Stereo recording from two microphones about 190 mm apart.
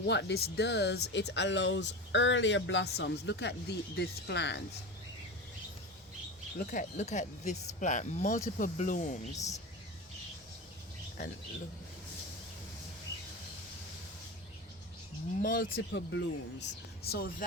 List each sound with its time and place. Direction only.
0.0 s speech: 65° left (ahead or behind)
6.7 s speech: 40° left (ahead or behind)
15.4 s speech: 50° left (ahead or behind); by 16.6 s 70° left (ahead or behind)
17.1 s speech: 55° left (ahead or behind)